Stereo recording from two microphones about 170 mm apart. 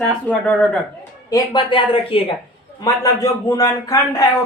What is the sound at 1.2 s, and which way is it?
Speech, 25° left (ahead or behind).